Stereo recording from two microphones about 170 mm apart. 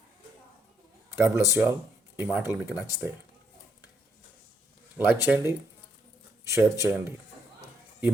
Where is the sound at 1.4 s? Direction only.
15° right (ahead or behind).